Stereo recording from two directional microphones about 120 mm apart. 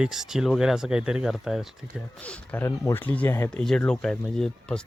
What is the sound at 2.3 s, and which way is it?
Speech, 15° left (ahead or behind).